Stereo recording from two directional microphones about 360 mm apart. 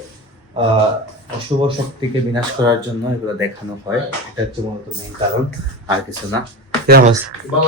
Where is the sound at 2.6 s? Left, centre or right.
Centre.